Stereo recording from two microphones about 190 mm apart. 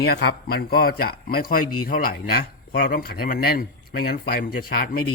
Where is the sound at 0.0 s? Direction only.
60° left (ahead or behind).